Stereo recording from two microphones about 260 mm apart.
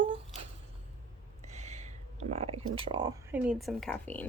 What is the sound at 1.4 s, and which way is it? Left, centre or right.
Speech, right.